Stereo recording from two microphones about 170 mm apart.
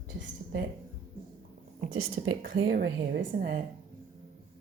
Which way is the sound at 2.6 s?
75° right (ahead or behind).